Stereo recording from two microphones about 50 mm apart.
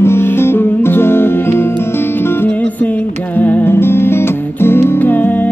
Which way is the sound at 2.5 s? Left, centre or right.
Left.